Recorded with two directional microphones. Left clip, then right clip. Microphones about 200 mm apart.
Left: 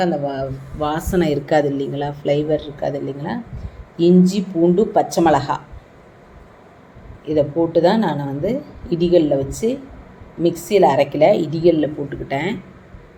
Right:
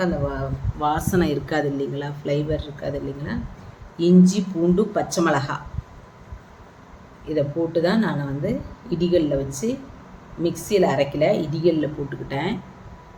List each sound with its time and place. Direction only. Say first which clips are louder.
0.0 s speech: left 5 dB; 5° left (ahead or behind)
7.3 s speech: left 6 dB; 5° left (ahead or behind)